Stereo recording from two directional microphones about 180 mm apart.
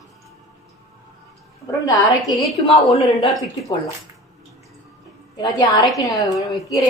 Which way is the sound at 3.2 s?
Centre (ahead or behind).